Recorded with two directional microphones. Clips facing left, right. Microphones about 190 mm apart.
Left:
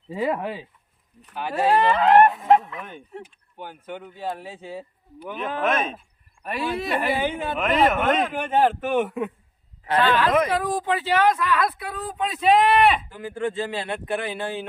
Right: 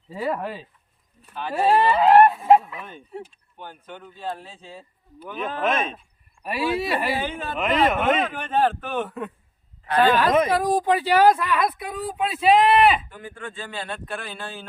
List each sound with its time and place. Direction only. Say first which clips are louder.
0.1 s speech: left 2 dB; 15° left (ahead or behind)
2.0 s speech: right 2 dB; 10° right (ahead or behind)
3.2 s speech: left 2 dB; 10° left (ahead or behind)
5.6 s speech: even; centre (ahead or behind)
7.2 s speech: left 3 dB; 10° left (ahead or behind)
7.6 s speech: even; centre (ahead or behind)
8.2 s speech: left 2 dB; 10° left (ahead or behind)
9.9 s speech: right 1 dB; 40° right (ahead or behind); by 13.0 s centre (ahead or behind)
13.1 s speech: left 9 dB; 25° left (ahead or behind)